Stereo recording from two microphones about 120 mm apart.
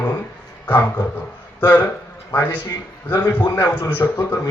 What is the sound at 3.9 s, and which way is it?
Speech, 20° left (ahead or behind).